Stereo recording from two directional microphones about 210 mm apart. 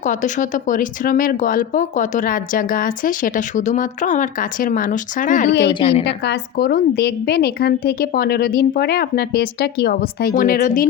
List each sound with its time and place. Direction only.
0.0 s speech: 35° left (ahead or behind)
5.6 s a woman's voice: 25° left (ahead or behind)
6.2 s a woman's voice: 50° left (ahead or behind)